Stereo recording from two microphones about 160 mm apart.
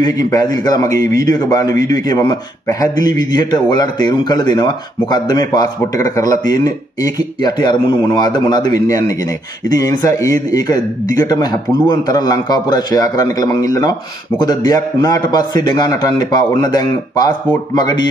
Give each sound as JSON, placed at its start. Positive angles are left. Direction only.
{"t": 0.0, "sound": "a man's voice", "side_deg": 25}